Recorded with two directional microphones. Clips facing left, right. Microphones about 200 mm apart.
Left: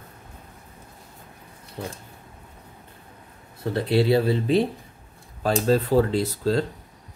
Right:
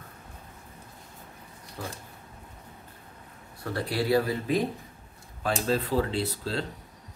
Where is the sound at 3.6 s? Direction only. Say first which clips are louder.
Left 7 dB; 25° left (ahead or behind).